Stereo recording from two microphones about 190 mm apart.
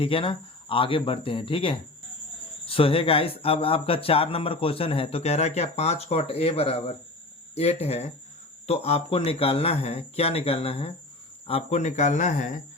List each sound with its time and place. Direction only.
0.0 s speech: 30° left (ahead or behind)